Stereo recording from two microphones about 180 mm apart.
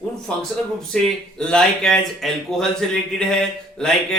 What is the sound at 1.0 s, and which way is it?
Speech, 5° left (ahead or behind).